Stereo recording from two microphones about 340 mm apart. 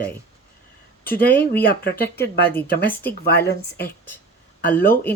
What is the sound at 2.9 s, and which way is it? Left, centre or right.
Speech, centre.